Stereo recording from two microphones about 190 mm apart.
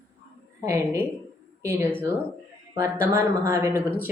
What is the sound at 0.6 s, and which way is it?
A woman's voice, 15° right (ahead or behind).